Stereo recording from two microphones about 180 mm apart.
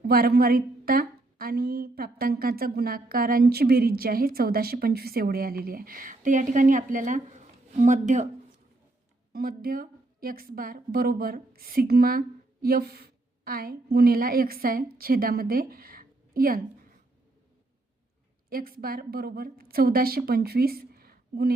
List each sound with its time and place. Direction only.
0.0 s a woman's voice: 55° right (ahead or behind)
9.3 s a woman's voice: 55° right (ahead or behind)
18.4 s a woman's voice: 55° right (ahead or behind)